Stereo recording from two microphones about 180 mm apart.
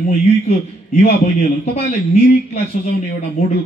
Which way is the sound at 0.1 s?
40° left (ahead or behind).